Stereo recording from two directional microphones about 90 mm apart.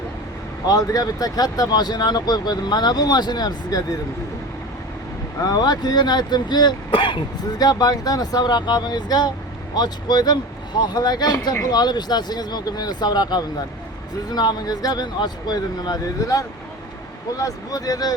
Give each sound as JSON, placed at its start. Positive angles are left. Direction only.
{"t": 0.7, "sound": "speech", "side_deg": 45}
{"t": 5.5, "sound": "speech", "side_deg": 50}
{"t": 7.6, "sound": "speech", "side_deg": 45}